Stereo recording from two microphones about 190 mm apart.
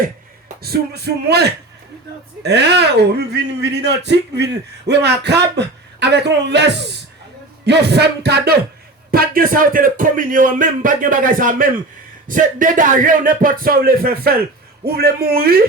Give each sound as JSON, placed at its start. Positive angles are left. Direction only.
{"t": 0.0, "sound": "a man's voice", "side_deg": -50}